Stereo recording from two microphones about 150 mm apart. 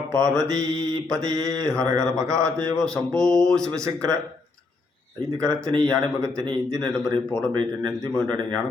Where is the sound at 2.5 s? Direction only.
5° left (ahead or behind).